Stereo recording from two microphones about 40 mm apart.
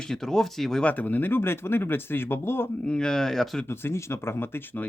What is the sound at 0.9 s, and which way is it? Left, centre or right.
Speech, left.